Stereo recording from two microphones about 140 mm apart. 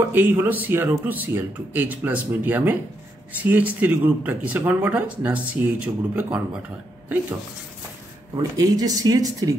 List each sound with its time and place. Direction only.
0.1 s speech: 15° right (ahead or behind)
8.4 s speech: 25° right (ahead or behind)